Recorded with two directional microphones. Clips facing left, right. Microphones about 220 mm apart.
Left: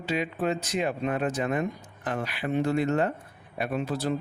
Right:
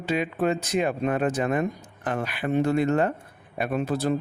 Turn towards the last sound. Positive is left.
turn(degrees=-50)  # may be behind; listen again after turning